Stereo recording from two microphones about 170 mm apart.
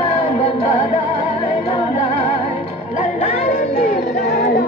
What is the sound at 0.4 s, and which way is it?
Music, 35° left (ahead or behind).